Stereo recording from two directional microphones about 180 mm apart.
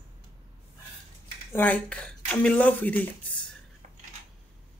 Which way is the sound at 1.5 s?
10° left (ahead or behind).